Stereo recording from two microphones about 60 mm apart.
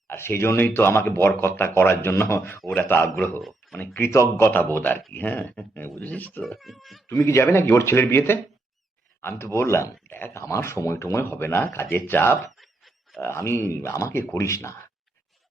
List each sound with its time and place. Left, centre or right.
0.1 s speech: left
4.1 s speech: left
4.4 s speech: left
6.4 s speech: centre
7.1 s speech: left
10.3 s speech: left
12.4 s a sound: centre
13.2 s speech: left